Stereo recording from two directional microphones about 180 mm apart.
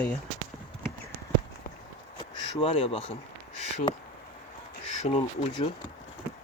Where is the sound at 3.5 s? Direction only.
35° left (ahead or behind).